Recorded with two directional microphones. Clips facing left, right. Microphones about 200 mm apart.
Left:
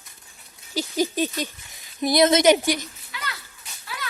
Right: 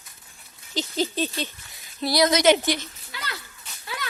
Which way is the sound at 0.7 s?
10° left (ahead or behind).